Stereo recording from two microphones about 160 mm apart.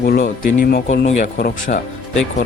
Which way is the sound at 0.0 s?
65° left (ahead or behind).